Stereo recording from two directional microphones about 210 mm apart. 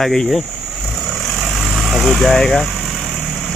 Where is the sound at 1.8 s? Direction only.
Centre (ahead or behind).